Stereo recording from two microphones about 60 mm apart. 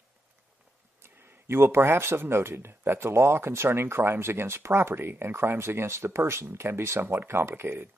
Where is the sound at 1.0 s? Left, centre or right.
Right.